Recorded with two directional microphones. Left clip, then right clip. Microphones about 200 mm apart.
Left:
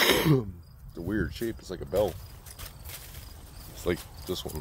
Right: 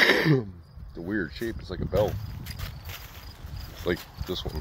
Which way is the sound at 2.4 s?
15° right (ahead or behind).